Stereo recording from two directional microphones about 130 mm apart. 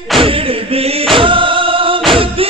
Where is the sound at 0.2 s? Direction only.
45° right (ahead or behind).